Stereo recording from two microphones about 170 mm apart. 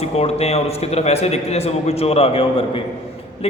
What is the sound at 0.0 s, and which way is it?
A man's voice, 35° left (ahead or behind).